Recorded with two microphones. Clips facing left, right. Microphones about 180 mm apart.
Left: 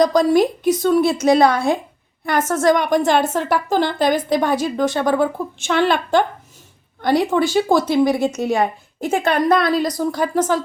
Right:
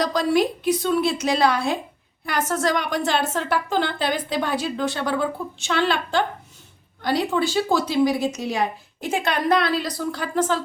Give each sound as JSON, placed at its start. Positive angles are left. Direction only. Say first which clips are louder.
{"t": 0.0, "sound": "a woman's voice", "louder": "left 6 dB", "side_deg": 45}